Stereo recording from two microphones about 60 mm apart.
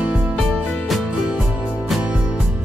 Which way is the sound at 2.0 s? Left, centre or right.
Right.